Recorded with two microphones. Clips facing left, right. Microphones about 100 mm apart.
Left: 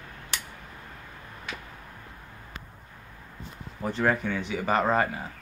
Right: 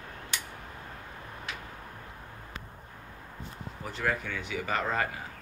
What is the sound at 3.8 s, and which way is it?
Speech, 40° left (ahead or behind).